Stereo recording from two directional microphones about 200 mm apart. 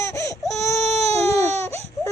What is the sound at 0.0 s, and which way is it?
Baby cry, 15° left (ahead or behind).